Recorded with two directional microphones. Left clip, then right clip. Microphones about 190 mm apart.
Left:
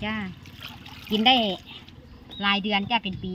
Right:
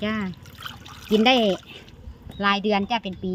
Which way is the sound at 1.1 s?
60° right (ahead or behind).